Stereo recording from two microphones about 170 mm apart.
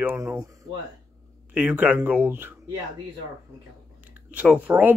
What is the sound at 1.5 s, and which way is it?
Speech, 10° right (ahead or behind).